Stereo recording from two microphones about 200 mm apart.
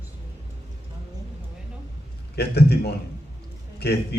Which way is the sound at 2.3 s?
55° left (ahead or behind).